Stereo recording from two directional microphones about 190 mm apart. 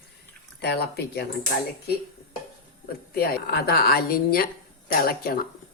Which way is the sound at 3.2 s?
55° left (ahead or behind).